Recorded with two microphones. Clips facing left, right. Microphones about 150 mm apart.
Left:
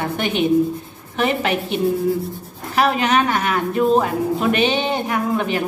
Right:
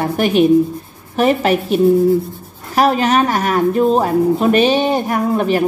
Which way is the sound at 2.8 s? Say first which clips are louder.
Right 4 dB; 35° right (ahead or behind).